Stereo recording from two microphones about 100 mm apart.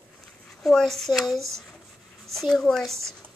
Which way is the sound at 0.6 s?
5° left (ahead or behind).